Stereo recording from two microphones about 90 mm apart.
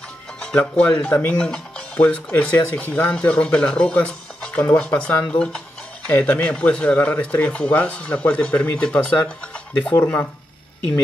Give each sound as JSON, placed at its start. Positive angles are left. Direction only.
{"t": 0.4, "sound": "speech", "side_deg": 10}
{"t": 1.4, "sound": "speech", "side_deg": 10}